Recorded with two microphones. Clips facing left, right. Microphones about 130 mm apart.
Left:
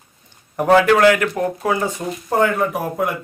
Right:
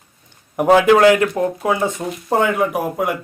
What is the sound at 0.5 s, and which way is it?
Speech, 15° right (ahead or behind).